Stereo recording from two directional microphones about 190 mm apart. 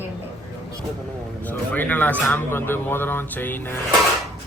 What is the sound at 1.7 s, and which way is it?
Speech, 10° left (ahead or behind).